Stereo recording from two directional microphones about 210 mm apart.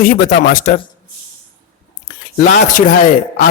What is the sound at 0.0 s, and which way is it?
Speech, 40° left (ahead or behind).